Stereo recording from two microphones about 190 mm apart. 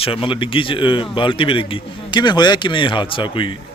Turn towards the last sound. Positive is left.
turn(degrees=25)  # may be behind; listen again after turning